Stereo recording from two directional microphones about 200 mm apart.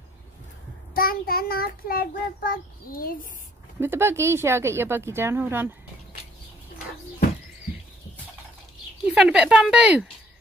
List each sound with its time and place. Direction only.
0.9 s a child's voice: 45° left (ahead or behind)
3.8 s speech: 10° right (ahead or behind)
9.0 s speech: 5° right (ahead or behind)